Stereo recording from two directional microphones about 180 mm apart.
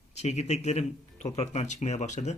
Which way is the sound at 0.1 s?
35° left (ahead or behind).